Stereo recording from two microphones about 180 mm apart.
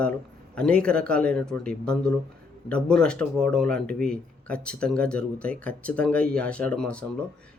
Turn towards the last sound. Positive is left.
turn(degrees=5)  # may be behind; listen again after turning